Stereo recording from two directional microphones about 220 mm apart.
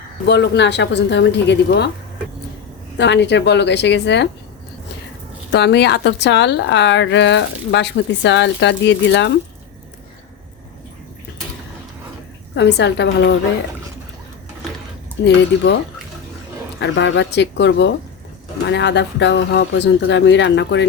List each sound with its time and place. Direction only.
0.3 s a woman's voice: 50° left (ahead or behind)
3.0 s a woman's voice: 50° left (ahead or behind)
5.5 s a woman's voice: 50° left (ahead or behind)
12.5 s a woman's voice: 50° left (ahead or behind)
15.2 s a woman's voice: 50° left (ahead or behind)
16.8 s a woman's voice: 55° left (ahead or behind)